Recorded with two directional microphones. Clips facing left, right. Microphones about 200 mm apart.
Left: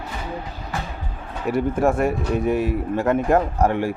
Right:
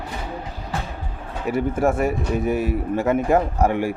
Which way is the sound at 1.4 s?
5° right (ahead or behind).